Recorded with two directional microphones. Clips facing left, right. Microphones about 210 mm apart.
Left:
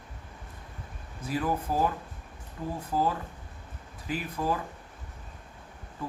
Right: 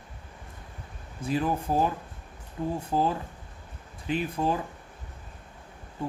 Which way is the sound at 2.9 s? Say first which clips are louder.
Even; 25° right (ahead or behind).